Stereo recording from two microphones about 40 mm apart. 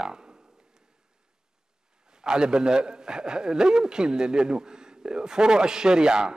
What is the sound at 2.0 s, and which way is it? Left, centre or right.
A man's voice, centre.